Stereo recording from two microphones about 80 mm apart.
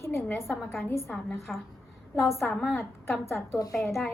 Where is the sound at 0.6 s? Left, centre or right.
Centre.